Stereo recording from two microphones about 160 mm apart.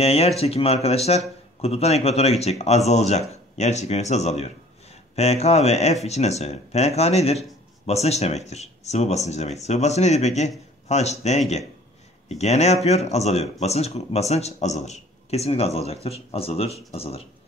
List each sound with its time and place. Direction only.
0.0 s speech: 40° left (ahead or behind)